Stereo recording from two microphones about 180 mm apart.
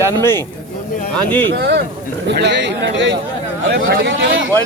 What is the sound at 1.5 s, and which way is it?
Speech, 65° right (ahead or behind).